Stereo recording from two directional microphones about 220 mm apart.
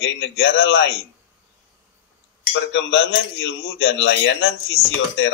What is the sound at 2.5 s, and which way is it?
Speech, 55° left (ahead or behind).